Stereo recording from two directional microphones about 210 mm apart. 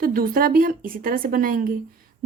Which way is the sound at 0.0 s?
45° right (ahead or behind).